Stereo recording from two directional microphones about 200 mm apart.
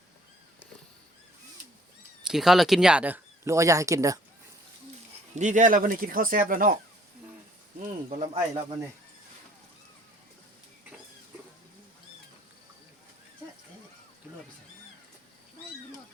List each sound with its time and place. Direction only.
2.2 s speech: centre (ahead or behind)
5.3 s speech: 35° right (ahead or behind)
7.8 s speech: 40° right (ahead or behind)